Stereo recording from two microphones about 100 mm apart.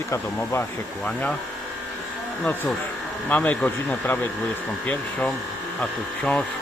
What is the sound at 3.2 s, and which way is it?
Speech, 15° left (ahead or behind).